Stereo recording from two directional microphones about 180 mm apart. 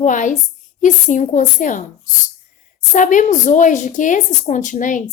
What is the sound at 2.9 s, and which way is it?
A woman's voice, 45° left (ahead or behind).